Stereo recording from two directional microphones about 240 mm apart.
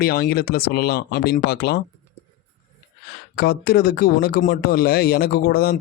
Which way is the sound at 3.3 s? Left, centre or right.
Left.